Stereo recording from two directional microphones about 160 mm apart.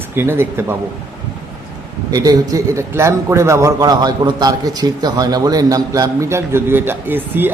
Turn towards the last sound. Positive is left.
turn(degrees=-10)  # may be behind; listen again after turning